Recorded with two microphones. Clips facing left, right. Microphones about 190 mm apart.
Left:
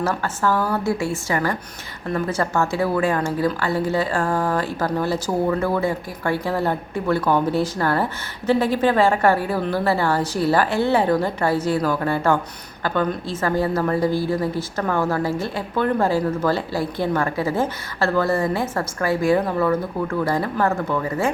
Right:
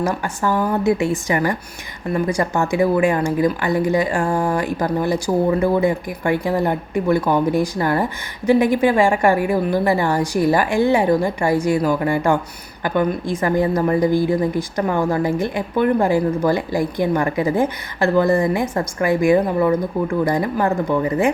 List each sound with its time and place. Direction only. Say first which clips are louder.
0.0 s a woman's voice: right 1 dB; 15° right (ahead or behind)